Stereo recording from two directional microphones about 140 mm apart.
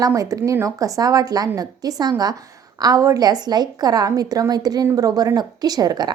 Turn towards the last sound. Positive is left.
turn(degrees=-30)  # may be behind; listen again after turning